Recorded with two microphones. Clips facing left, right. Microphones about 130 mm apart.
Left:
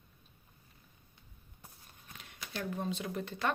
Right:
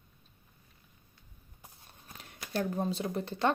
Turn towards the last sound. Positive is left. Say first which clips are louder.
# right 5 dB
turn(degrees=-30)  # may be behind; listen again after turning